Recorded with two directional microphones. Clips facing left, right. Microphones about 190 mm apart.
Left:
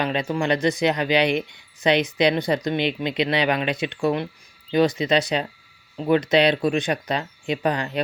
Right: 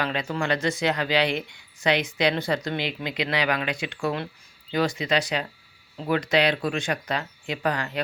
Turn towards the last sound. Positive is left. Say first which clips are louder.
# left 4 dB
turn(degrees=20)  # may be behind; listen again after turning